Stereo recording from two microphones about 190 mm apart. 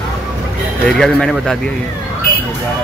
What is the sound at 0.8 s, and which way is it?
Speech, 5° left (ahead or behind).